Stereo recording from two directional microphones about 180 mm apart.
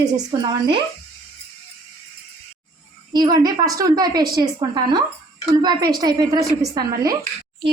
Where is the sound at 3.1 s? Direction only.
20° right (ahead or behind).